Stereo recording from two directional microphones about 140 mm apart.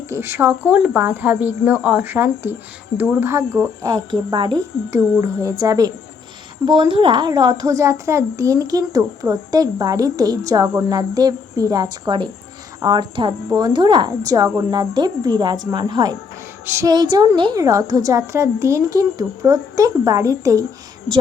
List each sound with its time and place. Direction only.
0.1 s speech: 20° right (ahead or behind)
3.8 s a woman's voice: 30° right (ahead or behind)
4.9 s a woman's voice: 20° right (ahead or behind)
6.7 s a woman's voice: 35° right (ahead or behind)